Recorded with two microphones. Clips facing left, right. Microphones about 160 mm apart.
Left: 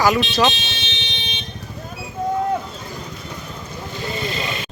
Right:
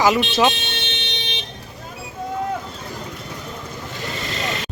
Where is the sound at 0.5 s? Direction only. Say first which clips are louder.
Right 2 dB; 55° right (ahead or behind).